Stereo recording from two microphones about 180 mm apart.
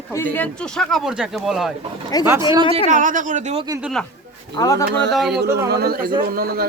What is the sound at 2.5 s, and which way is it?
Speech, 25° right (ahead or behind).